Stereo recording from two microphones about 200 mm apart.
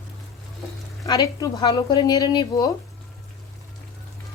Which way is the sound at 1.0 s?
15° left (ahead or behind).